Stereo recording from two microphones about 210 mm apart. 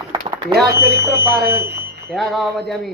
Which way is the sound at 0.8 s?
45° right (ahead or behind).